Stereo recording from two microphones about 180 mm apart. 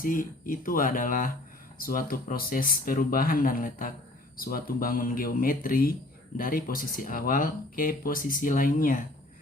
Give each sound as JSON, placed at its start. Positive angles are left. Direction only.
{"t": 0.0, "sound": "speech", "side_deg": 50}